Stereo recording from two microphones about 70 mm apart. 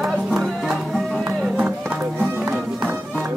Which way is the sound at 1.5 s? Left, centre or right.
Centre.